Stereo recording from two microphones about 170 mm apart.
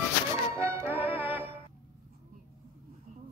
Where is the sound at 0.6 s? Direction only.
15° right (ahead or behind).